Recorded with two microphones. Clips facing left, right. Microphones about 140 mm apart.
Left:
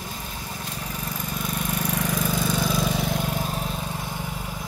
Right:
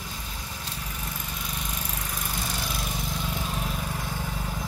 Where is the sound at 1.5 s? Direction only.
70° left (ahead or behind).